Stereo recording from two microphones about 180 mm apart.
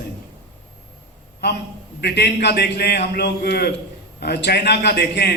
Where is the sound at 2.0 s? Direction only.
65° left (ahead or behind).